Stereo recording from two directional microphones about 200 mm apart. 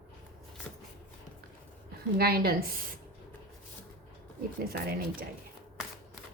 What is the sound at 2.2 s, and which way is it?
Speech, 50° right (ahead or behind).